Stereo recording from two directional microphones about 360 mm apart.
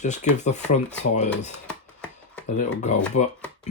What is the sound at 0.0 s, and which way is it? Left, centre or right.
Speech, centre.